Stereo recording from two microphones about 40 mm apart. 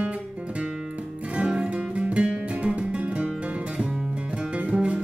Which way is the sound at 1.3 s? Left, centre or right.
Right.